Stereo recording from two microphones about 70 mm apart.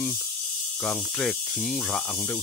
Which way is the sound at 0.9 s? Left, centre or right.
Centre.